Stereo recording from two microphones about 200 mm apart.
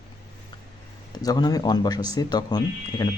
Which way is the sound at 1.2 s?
20° left (ahead or behind).